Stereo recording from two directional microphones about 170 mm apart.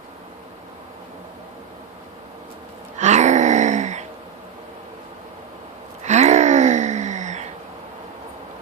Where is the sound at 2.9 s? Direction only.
45° right (ahead or behind).